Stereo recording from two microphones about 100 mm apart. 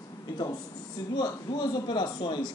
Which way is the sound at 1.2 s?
45° left (ahead or behind).